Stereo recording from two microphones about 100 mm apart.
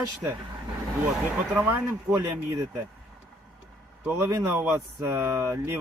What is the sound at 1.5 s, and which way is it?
Speech, 20° right (ahead or behind).